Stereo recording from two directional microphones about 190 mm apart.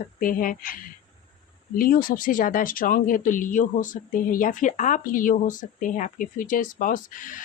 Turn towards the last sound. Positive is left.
turn(degrees=45)  # may be behind; listen again after turning